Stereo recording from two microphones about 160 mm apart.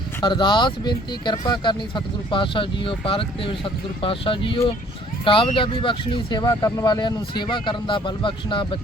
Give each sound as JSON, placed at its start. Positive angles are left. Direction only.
{"t": 0.2, "sound": "speech", "side_deg": 30}